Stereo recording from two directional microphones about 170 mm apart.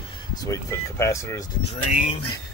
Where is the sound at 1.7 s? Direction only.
45° left (ahead or behind).